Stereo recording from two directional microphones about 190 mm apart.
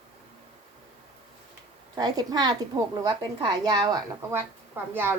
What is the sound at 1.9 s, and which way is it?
A woman's voice, 20° right (ahead or behind).